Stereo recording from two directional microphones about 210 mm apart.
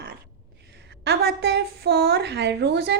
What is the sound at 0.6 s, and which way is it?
A woman's voice, 50° right (ahead or behind).